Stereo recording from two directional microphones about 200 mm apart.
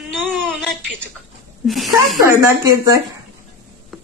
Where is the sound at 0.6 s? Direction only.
Centre (ahead or behind).